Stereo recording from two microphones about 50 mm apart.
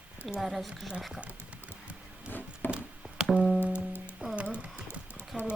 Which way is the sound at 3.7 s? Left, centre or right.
Left.